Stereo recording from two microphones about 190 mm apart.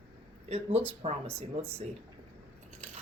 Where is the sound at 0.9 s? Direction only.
30° right (ahead or behind).